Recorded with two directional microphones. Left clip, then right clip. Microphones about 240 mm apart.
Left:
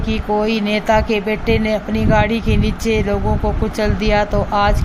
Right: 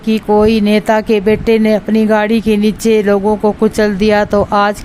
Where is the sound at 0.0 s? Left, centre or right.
Right.